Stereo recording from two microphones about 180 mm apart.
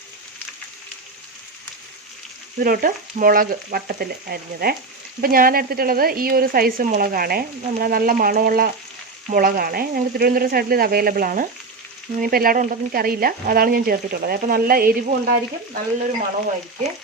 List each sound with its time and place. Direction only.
2.6 s speech: 50° right (ahead or behind)
5.2 s frying: 55° right (ahead or behind)
9.3 s speech: 55° right (ahead or behind)
12.2 s frying: 55° right (ahead or behind)